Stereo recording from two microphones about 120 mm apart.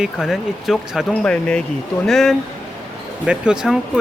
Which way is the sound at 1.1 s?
10° left (ahead or behind).